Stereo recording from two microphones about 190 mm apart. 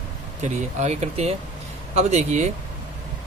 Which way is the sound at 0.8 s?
35° right (ahead or behind).